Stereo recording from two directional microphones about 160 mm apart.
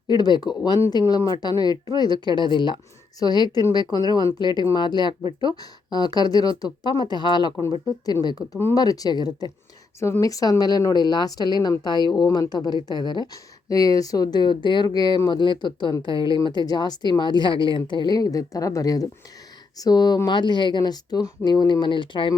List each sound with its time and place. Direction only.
0.1 s speech: 25° left (ahead or behind)